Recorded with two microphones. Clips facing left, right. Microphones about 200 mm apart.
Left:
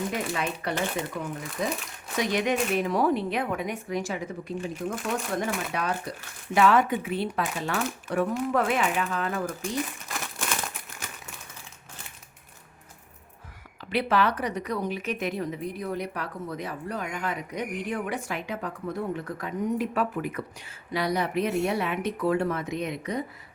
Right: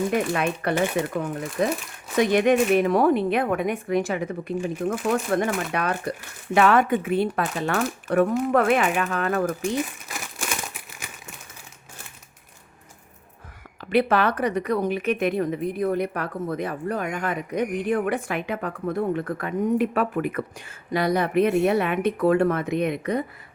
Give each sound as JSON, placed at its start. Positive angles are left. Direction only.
{"t": 0.1, "sound": "speech", "side_deg": -55}
{"t": 10.1, "sound": "crumpling", "side_deg": -10}
{"t": 13.9, "sound": "speech", "side_deg": -50}